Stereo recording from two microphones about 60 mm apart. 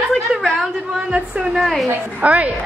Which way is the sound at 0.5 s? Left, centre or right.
Centre.